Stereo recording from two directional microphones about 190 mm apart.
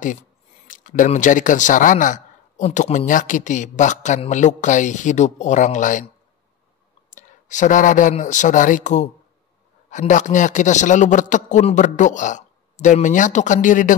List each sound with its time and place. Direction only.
0.7 s a man's voice: 45° left (ahead or behind)
7.1 s a man's voice: 40° left (ahead or behind)